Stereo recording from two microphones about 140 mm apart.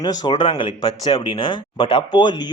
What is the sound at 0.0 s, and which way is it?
Speech, 30° left (ahead or behind).